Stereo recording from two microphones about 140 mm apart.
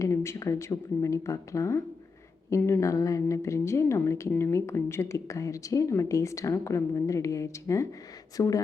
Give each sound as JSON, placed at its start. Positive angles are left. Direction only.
{"t": 0.0, "sound": "speech", "side_deg": 20}